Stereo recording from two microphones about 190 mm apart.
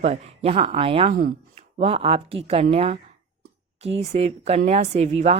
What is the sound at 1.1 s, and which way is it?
Speech, 45° right (ahead or behind).